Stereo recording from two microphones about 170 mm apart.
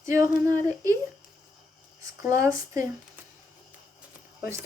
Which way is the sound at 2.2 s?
15° right (ahead or behind).